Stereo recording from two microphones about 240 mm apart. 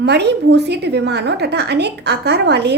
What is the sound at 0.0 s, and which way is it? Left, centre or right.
A woman's voice, right.